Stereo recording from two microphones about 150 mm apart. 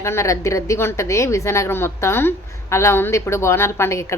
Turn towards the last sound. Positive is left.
turn(degrees=20)  # may be behind; listen again after turning